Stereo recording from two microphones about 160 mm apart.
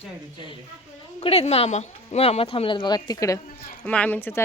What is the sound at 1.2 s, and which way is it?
A woman's voice, 40° left (ahead or behind).